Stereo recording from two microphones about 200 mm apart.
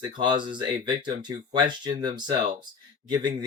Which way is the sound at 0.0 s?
20° right (ahead or behind).